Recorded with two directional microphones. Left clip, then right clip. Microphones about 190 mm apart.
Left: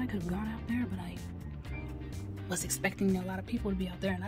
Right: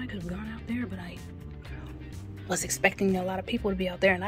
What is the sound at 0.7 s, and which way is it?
Music, 10° left (ahead or behind).